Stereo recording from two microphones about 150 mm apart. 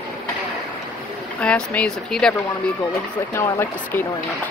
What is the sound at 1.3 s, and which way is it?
Speech, 5° left (ahead or behind).